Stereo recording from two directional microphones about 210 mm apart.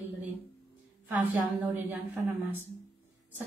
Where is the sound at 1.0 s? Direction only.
10° right (ahead or behind).